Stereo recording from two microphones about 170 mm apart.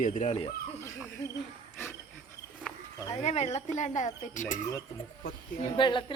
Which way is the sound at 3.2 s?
40° left (ahead or behind).